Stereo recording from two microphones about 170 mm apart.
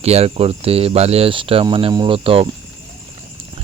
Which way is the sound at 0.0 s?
35° right (ahead or behind).